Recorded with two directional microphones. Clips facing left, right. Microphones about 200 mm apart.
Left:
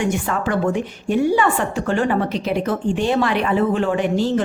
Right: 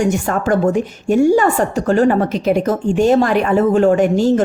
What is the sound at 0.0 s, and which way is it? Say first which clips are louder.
A woman's voice: right 4 dB; 45° right (ahead or behind).